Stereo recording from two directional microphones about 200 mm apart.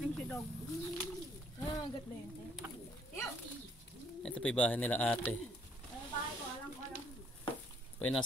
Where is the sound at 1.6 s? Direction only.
20° left (ahead or behind).